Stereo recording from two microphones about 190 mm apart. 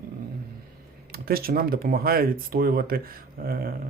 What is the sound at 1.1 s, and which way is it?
Speech, 50° right (ahead or behind).